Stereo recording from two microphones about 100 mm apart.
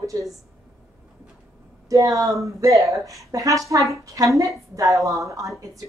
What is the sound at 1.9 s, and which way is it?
A woman's voice, 35° right (ahead or behind).